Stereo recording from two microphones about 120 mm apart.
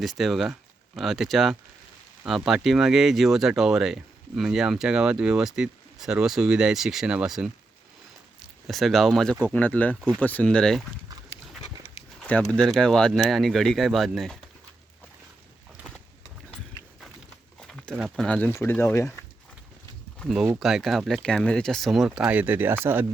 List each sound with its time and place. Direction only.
0.0 s speech: centre (ahead or behind)
12.5 s speech: 5° left (ahead or behind)
17.6 s a sound: 5° left (ahead or behind)
18.0 s speech: 5° left (ahead or behind)
18.5 s speech: 20° left (ahead or behind)
20.2 s speech: 5° right (ahead or behind); by 23.0 s 20° right (ahead or behind)